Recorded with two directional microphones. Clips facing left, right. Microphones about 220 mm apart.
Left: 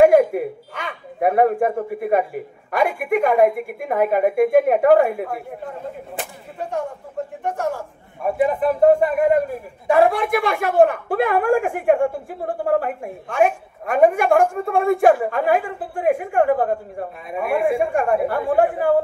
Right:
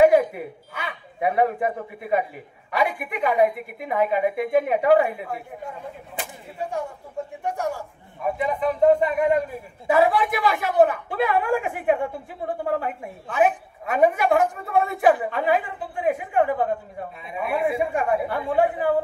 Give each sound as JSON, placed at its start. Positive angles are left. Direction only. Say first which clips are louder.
{"t": 0.0, "sound": "a sound", "louder": "left 3 dB", "side_deg": 50}
{"t": 0.8, "sound": "a woman's voice", "louder": "left 5 dB", "side_deg": 50}
{"t": 7.4, "sound": "a man's voice", "louder": "left 3 dB", "side_deg": -10}
{"t": 8.4, "sound": "a woman's voice", "louder": "left 5 dB", "side_deg": 50}